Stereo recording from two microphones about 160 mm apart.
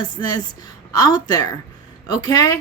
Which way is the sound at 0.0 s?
25° left (ahead or behind).